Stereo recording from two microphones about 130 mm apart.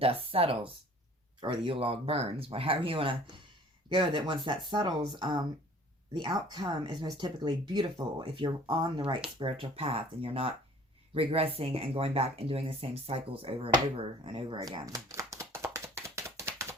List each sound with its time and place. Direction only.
0.0 s speech: 45° right (ahead or behind); by 16.7 s 20° right (ahead or behind)